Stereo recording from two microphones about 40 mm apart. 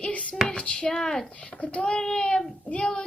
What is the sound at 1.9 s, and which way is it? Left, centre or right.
Speech, centre.